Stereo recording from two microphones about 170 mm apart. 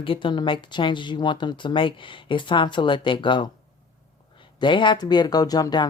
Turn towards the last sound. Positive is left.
turn(degrees=25)  # may be behind; listen again after turning